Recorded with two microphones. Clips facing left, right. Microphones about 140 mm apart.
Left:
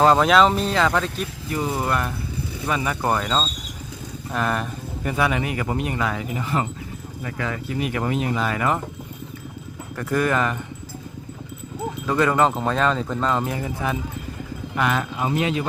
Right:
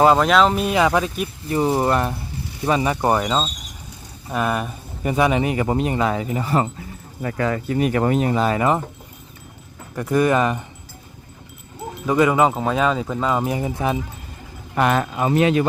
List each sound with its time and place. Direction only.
0.0 s speech: 5° right (ahead or behind)
0.6 s speech: 15° right (ahead or behind)
1.5 s speech: 30° right (ahead or behind); by 5.1 s 10° right (ahead or behind)
5.1 s speech: 20° right (ahead or behind)
9.9 s speech: 20° right (ahead or behind)
12.0 s speech: 10° right (ahead or behind)
14.8 s speech: 45° right (ahead or behind)
15.2 s a man's voice: 65° right (ahead or behind)